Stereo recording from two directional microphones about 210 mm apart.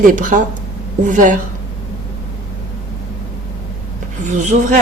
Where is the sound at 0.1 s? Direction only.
40° right (ahead or behind).